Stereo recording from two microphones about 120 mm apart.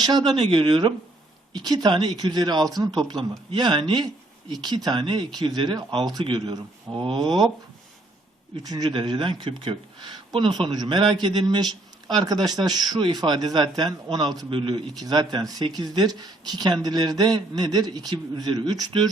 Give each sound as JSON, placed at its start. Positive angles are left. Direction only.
{"t": 0.0, "sound": "speech", "side_deg": -35}
{"t": 8.6, "sound": "speech", "side_deg": -35}